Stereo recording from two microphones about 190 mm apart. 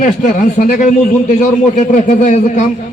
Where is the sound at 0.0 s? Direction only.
45° left (ahead or behind).